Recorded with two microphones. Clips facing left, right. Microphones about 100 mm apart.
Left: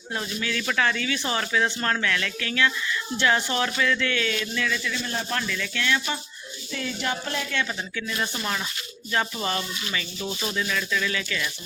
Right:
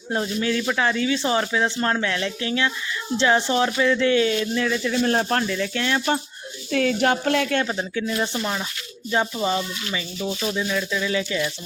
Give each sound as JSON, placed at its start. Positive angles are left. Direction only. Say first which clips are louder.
{"t": 0.1, "sound": "speech", "louder": "right 6 dB", "side_deg": -30}
{"t": 5.0, "sound": "speech", "louder": "right 8 dB", "side_deg": -55}
{"t": 5.4, "sound": "speech", "louder": "right 5 dB", "side_deg": -35}
{"t": 6.7, "sound": "speech", "louder": "right 10 dB", "side_deg": -70}
{"t": 7.6, "sound": "speech", "louder": "right 5 dB", "side_deg": -30}